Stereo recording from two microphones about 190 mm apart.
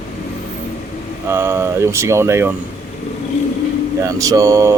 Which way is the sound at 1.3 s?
10° right (ahead or behind).